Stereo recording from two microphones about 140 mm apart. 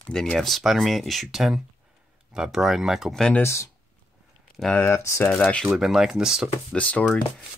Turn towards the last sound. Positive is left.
turn(degrees=10)  # may be behind; listen again after turning